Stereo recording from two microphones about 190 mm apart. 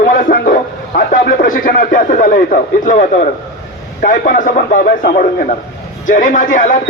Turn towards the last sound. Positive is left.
turn(degrees=45)  # may be behind; listen again after turning